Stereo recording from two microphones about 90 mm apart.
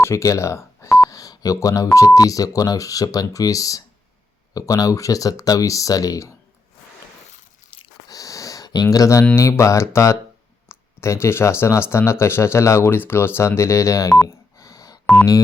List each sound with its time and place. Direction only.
0.0 s speech: 35° left (ahead or behind)
8.0 s a sound: 40° left (ahead or behind)
9.3 s speech: 35° left (ahead or behind)
10.7 s a sound: 30° left (ahead or behind)
11.6 s speech: 30° left (ahead or behind)
14.3 s telephone dialing: 35° left (ahead or behind)